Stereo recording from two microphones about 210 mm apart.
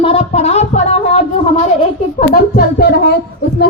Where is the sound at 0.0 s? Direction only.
30° left (ahead or behind).